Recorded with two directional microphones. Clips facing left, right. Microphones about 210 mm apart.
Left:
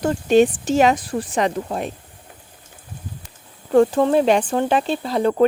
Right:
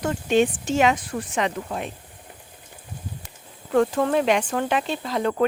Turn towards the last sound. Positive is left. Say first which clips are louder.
# left 5 dB
turn(degrees=35)  # may be behind; listen again after turning